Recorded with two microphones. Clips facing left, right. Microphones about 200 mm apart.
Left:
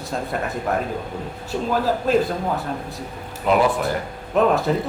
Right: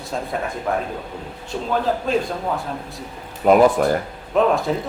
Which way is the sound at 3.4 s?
45° right (ahead or behind).